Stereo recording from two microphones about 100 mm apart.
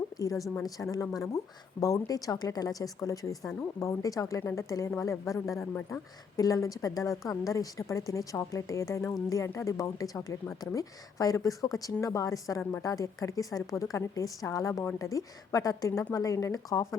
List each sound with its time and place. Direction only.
0.2 s a woman's voice: 35° left (ahead or behind)